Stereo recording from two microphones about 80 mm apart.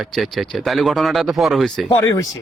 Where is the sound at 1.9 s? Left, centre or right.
Left.